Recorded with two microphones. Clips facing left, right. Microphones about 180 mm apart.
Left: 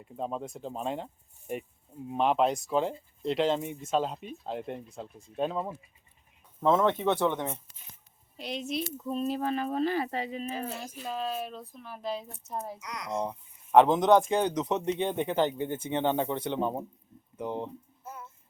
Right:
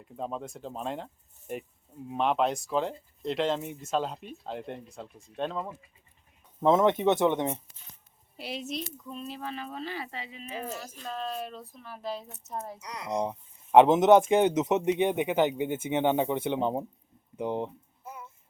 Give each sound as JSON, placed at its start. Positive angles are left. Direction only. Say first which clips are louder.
{"t": 0.0, "sound": "speech", "louder": "left 1 dB", "side_deg": 0}
{"t": 6.6, "sound": "speech", "louder": "right 2 dB", "side_deg": -15}
{"t": 8.4, "sound": "speech", "louder": "left 2 dB", "side_deg": -5}
{"t": 9.0, "sound": "speech", "louder": "left 8 dB", "side_deg": 40}
{"t": 10.8, "sound": "speech", "louder": "left 2 dB", "side_deg": 10}
{"t": 12.8, "sound": "speech", "louder": "even", "side_deg": -30}
{"t": 13.1, "sound": "speech", "louder": "right 3 dB", "side_deg": -15}
{"t": 17.3, "sound": "a sound", "louder": "right 3 dB", "side_deg": -15}